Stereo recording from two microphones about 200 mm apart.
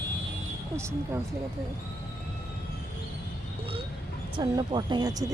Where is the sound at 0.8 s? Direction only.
15° right (ahead or behind).